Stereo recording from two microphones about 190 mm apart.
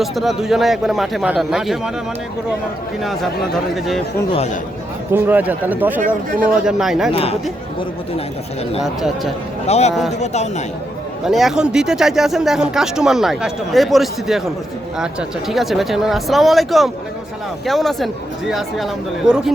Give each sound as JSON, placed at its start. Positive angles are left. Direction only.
{"t": 0.0, "sound": "speech", "side_deg": 0}
{"t": 3.0, "sound": "speech", "side_deg": 0}
{"t": 5.1, "sound": "speech", "side_deg": -10}
{"t": 7.1, "sound": "speech", "side_deg": 30}
{"t": 8.8, "sound": "speech", "side_deg": 0}
{"t": 9.6, "sound": "speech", "side_deg": 35}
{"t": 11.3, "sound": "speech", "side_deg": 0}